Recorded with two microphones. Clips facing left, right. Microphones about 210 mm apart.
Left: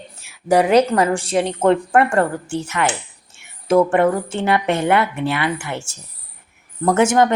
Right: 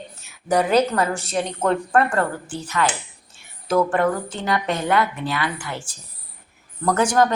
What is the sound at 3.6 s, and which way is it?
Speech, 25° left (ahead or behind).